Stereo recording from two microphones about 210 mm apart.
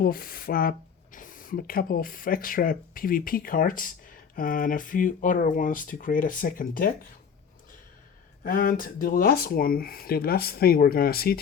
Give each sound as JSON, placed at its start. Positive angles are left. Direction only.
{"t": 0.0, "sound": "speech", "side_deg": 45}
{"t": 8.4, "sound": "speech", "side_deg": 40}